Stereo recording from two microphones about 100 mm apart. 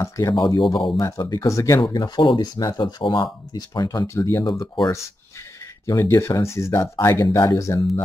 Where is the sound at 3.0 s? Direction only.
55° left (ahead or behind).